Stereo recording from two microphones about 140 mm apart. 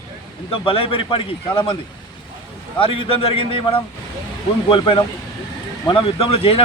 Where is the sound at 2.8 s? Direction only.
40° left (ahead or behind).